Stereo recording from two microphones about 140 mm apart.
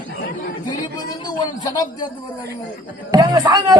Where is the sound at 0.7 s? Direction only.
30° left (ahead or behind).